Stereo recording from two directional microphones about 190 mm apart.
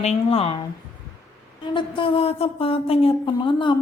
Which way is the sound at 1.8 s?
25° left (ahead or behind).